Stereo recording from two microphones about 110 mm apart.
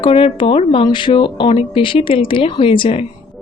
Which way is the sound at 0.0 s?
55° left (ahead or behind).